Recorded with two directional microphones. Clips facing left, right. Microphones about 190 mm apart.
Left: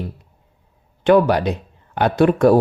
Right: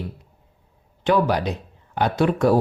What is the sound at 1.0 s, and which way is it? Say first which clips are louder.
Speech: left 6 dB; 60° left (ahead or behind).